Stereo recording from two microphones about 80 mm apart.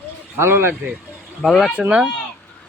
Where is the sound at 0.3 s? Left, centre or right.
Right.